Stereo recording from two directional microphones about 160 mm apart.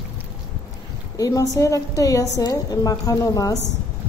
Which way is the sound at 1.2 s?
20° left (ahead or behind).